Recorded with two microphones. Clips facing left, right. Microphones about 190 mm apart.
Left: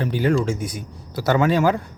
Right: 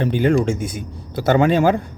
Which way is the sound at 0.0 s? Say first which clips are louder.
Right 3 dB; 25° right (ahead or behind).